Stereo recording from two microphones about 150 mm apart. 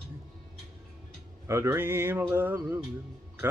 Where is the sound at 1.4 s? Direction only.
20° right (ahead or behind).